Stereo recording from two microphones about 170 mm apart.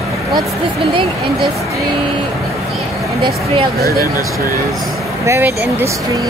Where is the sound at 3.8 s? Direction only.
65° right (ahead or behind).